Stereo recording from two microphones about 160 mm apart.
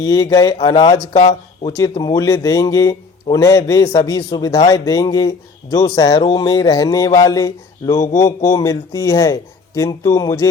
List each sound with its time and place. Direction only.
0.0 s speech: 25° left (ahead or behind)